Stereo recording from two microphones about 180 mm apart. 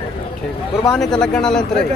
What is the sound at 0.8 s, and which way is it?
Speech, 5° left (ahead or behind).